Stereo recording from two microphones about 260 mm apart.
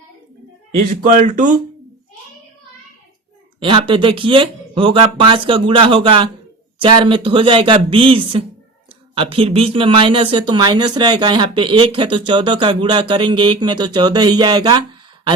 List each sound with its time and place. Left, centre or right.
1.0 s speech: right
3.6 s speech: centre